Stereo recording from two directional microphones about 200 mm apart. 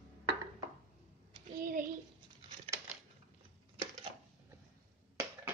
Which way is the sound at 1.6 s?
45° right (ahead or behind).